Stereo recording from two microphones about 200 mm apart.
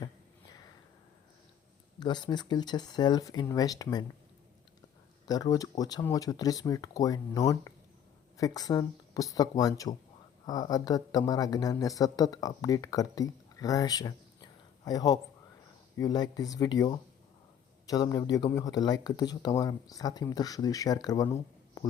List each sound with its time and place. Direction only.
2.0 s speech: 20° left (ahead or behind)
5.3 s speech: 20° left (ahead or behind)